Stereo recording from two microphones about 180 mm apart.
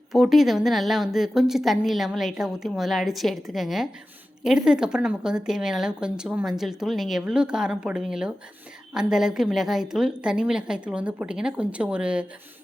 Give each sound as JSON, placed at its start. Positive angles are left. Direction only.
{"t": 0.1, "sound": "a woman's voice", "side_deg": 0}